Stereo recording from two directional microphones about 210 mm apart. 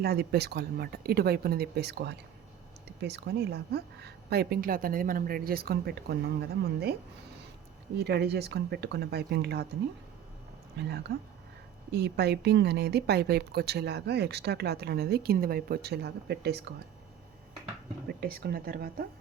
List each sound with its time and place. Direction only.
0.0 s speech: 50° right (ahead or behind)
7.9 s speech: 50° right (ahead or behind)
10.8 s speech: 50° right (ahead or behind)
18.2 s speech: 45° right (ahead or behind)